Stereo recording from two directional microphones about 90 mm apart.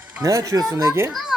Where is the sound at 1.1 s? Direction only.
Centre (ahead or behind).